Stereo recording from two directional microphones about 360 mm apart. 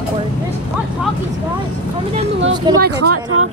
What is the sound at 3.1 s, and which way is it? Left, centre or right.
Speech, right.